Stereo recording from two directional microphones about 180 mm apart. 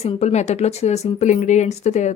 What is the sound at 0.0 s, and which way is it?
A woman's voice, 35° left (ahead or behind).